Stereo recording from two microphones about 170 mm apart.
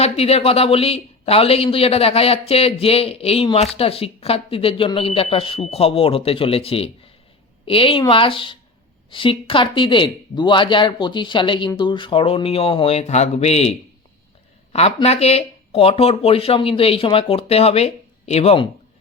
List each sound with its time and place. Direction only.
0.0 s speech: 35° left (ahead or behind)